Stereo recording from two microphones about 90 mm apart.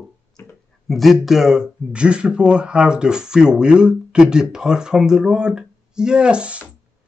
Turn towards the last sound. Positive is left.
turn(degrees=-10)  # may be behind; listen again after turning